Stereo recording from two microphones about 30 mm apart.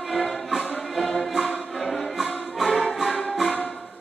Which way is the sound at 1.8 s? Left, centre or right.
Centre.